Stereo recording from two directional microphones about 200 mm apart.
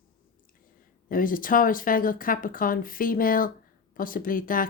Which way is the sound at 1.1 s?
45° left (ahead or behind).